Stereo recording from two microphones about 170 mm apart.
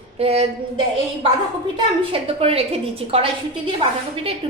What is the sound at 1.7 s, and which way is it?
A woman's voice, 35° right (ahead or behind).